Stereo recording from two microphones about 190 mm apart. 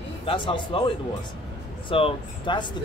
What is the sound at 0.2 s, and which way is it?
Speech, 25° left (ahead or behind).